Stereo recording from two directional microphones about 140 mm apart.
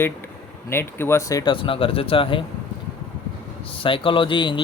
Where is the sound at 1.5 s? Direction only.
40° left (ahead or behind).